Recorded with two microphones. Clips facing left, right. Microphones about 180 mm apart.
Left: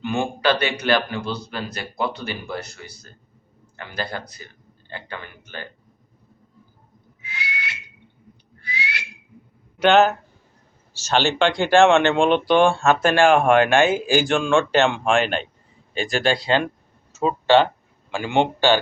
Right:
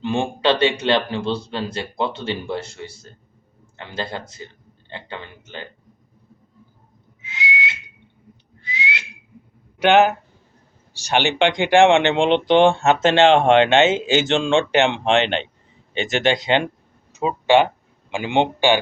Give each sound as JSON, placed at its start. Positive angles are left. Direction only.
{"t": 0.0, "sound": "speech", "side_deg": -25}
{"t": 7.2, "sound": "whistle", "side_deg": -20}
{"t": 9.7, "sound": "speech", "side_deg": -15}